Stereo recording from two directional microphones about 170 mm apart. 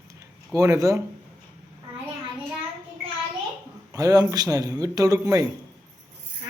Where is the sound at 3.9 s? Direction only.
20° right (ahead or behind).